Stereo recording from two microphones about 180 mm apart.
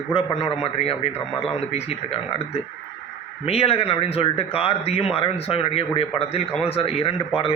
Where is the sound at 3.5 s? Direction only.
35° left (ahead or behind).